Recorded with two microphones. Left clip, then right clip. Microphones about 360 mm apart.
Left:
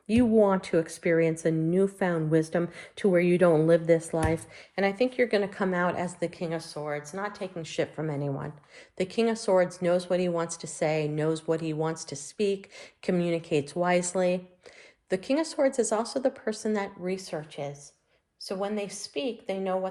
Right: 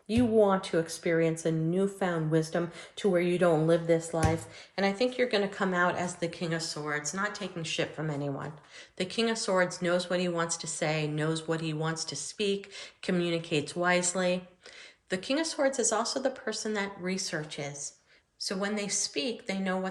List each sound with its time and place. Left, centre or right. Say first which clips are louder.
0.1 s speech: left 2 dB; centre